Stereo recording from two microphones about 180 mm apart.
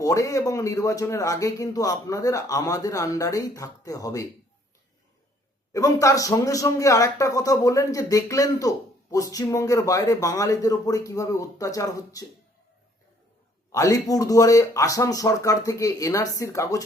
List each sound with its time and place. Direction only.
0.0 s speech: 20° left (ahead or behind)
5.7 s speech: 20° left (ahead or behind)
13.7 s speech: 20° left (ahead or behind)